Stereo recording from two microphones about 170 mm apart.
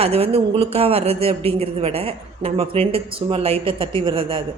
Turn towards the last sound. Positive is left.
turn(degrees=-30)  # may be behind; listen again after turning